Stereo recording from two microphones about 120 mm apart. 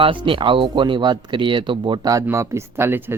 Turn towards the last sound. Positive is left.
turn(degrees=-20)  # may be behind; listen again after turning